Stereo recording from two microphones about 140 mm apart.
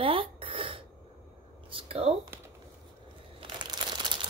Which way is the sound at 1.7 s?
40° right (ahead or behind).